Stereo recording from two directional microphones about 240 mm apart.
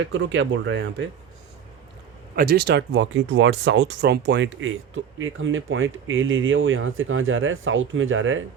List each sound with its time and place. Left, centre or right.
0.1 s speech: right
2.3 s speech: right